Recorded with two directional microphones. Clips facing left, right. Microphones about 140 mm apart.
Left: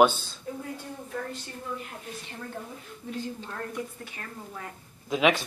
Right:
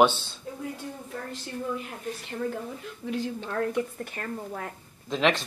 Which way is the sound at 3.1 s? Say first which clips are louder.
Right 4 dB; 90° right.